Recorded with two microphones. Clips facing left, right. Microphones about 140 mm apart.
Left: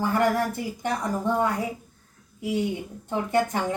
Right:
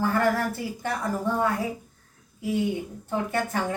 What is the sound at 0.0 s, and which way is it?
Speech, 15° left (ahead or behind).